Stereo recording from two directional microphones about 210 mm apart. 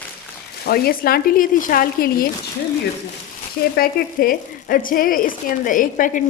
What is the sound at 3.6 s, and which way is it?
Speech, 45° left (ahead or behind).